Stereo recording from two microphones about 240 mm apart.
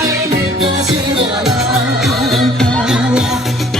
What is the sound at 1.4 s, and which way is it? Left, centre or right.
Music, centre.